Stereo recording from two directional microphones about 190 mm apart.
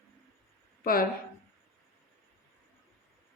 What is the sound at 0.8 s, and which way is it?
Speech, 50° left (ahead or behind).